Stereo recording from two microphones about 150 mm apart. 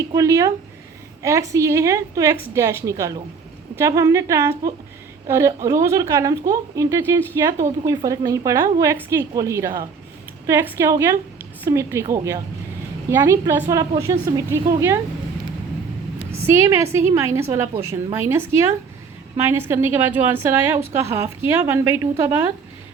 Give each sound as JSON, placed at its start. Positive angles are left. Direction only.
{"t": 0.1, "sound": "a woman's voice", "side_deg": -20}
{"t": 16.3, "sound": "a woman's voice", "side_deg": -15}